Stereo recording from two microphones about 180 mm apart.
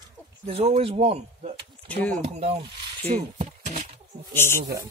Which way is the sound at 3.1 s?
40° right (ahead or behind).